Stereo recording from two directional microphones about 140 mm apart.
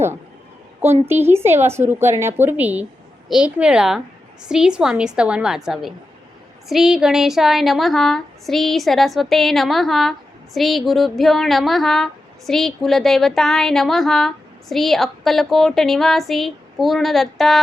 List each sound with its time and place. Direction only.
0.8 s speech: 15° right (ahead or behind); by 17.6 s centre (ahead or behind)